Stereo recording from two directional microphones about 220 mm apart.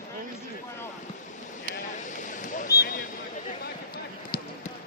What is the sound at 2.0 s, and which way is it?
Vehicle, 35° left (ahead or behind).